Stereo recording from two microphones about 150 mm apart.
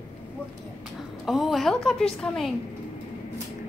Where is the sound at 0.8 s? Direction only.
Centre (ahead or behind).